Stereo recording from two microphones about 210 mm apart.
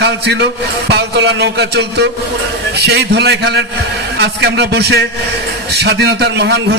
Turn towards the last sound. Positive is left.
turn(degrees=-55)  # may be behind; listen again after turning